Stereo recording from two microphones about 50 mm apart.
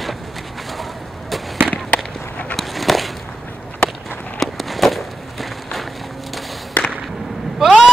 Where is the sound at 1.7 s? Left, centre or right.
Left.